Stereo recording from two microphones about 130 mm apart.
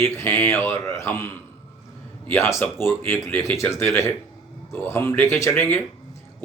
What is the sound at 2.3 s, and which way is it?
Speech, 20° left (ahead or behind).